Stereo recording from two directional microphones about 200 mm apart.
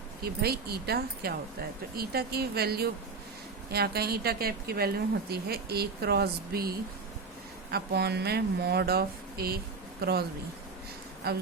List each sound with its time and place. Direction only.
0.2 s speech: 50° right (ahead or behind)
11.2 s speech: 50° right (ahead or behind)